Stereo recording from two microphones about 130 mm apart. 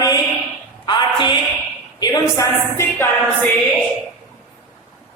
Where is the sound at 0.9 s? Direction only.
35° left (ahead or behind).